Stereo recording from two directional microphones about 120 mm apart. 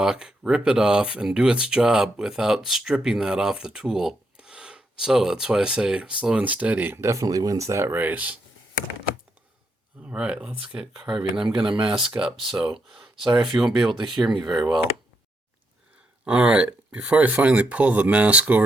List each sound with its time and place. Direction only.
0.0 s speech: 5° right (ahead or behind)
10.0 s speech: 10° right (ahead or behind)
11.7 s speech: 45° right (ahead or behind)
11.9 s speech: 5° right (ahead or behind)
16.2 s speech: 10° right (ahead or behind)